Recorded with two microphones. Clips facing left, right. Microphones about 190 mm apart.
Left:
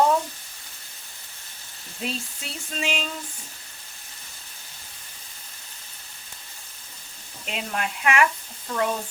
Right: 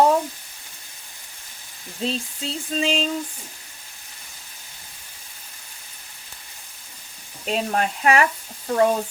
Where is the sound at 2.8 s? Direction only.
30° right (ahead or behind).